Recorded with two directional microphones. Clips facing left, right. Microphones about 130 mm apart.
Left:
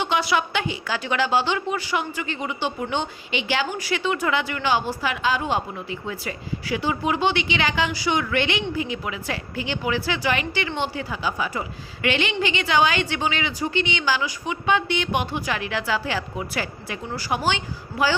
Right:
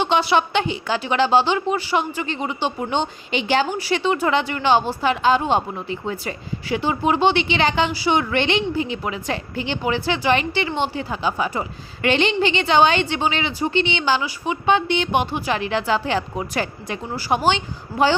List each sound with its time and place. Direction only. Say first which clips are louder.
0.0 s a woman's voice: right 4 dB; 30° right (ahead or behind)
3.3 s a woman's voice: right 5 dB; 35° right (ahead or behind)